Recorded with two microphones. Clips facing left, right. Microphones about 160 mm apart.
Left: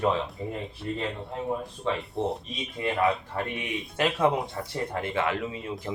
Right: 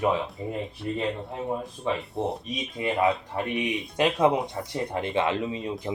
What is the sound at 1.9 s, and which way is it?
Speech, 15° right (ahead or behind).